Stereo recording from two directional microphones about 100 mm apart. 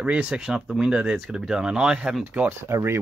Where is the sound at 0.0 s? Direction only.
10° right (ahead or behind).